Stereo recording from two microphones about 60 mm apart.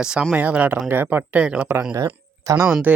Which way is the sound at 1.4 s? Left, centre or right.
Right.